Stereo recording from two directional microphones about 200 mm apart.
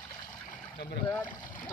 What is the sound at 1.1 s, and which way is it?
Speech, 10° left (ahead or behind).